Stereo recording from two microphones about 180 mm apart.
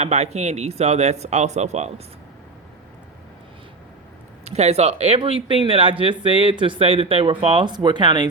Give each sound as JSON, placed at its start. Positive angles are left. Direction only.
{"t": 0.0, "sound": "speech", "side_deg": -40}
{"t": 4.4, "sound": "speech", "side_deg": -35}